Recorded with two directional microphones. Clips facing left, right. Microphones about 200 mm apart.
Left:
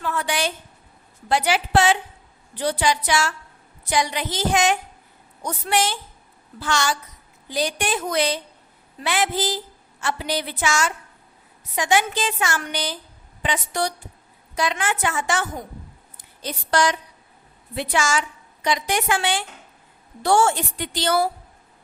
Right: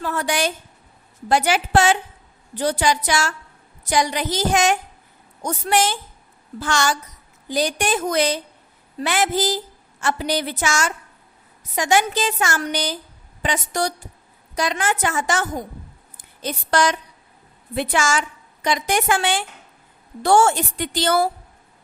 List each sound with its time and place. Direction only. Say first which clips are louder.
0.0 s a woman's voice: right 2 dB; 40° right (ahead or behind)
16.1 s a sound: right 4 dB; 55° right (ahead or behind)
17.7 s a woman's voice: right 2 dB; 50° right (ahead or behind)